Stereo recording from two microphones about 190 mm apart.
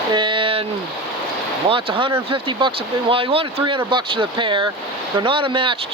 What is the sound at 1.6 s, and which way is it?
Speech, 30° right (ahead or behind).